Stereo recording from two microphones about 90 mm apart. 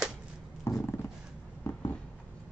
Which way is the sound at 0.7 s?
30° left (ahead or behind).